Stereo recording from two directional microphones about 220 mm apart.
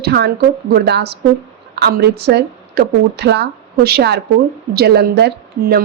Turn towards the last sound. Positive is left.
turn(degrees=-45)  # may be behind; listen again after turning